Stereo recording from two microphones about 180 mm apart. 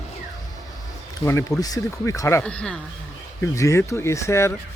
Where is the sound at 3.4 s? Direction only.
15° left (ahead or behind).